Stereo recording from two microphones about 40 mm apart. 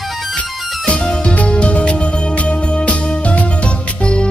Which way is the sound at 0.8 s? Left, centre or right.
Left.